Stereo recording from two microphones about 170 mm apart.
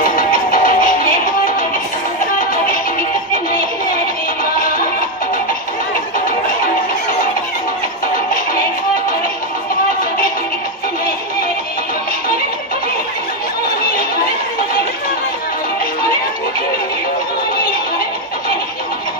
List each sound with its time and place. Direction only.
0.0 s music: 55° left (ahead or behind)